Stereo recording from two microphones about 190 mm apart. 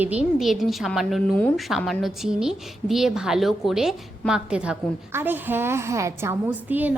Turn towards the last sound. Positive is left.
turn(degrees=-10)  # may be behind; listen again after turning